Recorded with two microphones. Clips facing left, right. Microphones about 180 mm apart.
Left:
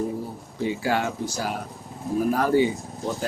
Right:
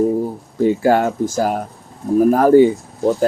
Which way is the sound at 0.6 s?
45° right (ahead or behind).